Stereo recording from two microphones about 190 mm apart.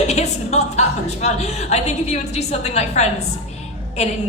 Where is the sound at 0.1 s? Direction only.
35° left (ahead or behind).